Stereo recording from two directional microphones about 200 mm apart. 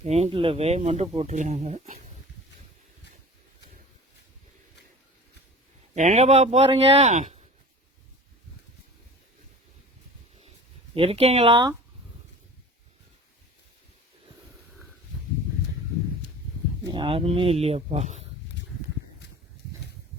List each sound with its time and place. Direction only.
0.0 s speech: 30° right (ahead or behind)
5.9 s speech: 35° right (ahead or behind)
10.9 s speech: 30° right (ahead or behind)
16.9 s speech: 25° right (ahead or behind)